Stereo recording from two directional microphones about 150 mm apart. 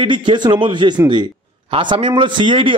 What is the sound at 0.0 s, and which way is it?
Speech, 35° right (ahead or behind).